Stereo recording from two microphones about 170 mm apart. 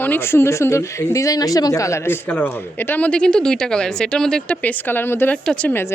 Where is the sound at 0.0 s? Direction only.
10° left (ahead or behind).